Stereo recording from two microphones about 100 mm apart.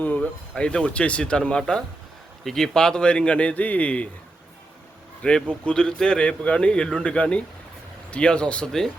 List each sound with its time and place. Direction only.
0.0 s a man's voice: 15° left (ahead or behind)
5.2 s a man's voice: 10° left (ahead or behind)